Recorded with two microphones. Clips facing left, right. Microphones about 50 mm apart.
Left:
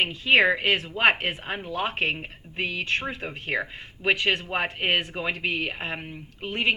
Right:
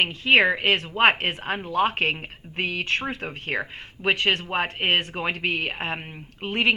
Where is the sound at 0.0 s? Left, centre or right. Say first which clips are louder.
Right 1 dB; right.